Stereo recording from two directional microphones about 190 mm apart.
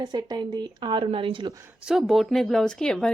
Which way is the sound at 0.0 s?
20° right (ahead or behind).